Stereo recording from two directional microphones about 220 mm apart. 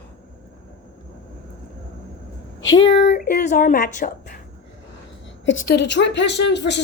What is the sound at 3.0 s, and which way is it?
Speech, 45° left (ahead or behind).